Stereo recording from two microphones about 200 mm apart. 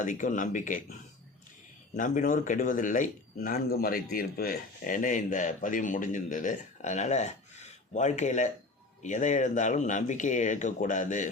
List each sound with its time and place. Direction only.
0.0 s speech: 40° left (ahead or behind)
2.0 s speech: 40° left (ahead or behind)